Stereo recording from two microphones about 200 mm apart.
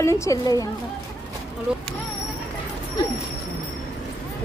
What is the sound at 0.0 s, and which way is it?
Speech, 15° left (ahead or behind).